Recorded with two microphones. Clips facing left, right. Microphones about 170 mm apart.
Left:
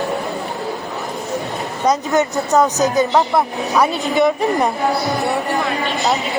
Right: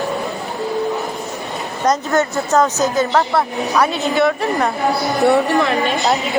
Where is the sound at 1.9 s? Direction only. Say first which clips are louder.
Even; 15° left (ahead or behind).